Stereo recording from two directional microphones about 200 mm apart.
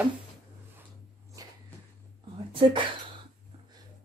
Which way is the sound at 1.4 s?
15° right (ahead or behind).